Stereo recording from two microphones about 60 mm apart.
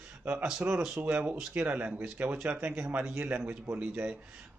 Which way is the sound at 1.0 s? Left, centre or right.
Right.